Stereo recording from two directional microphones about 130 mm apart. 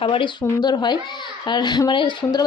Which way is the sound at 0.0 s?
40° left (ahead or behind).